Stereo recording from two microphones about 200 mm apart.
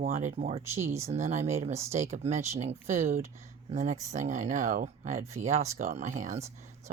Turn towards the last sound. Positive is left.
turn(degrees=-35)  # may be behind; listen again after turning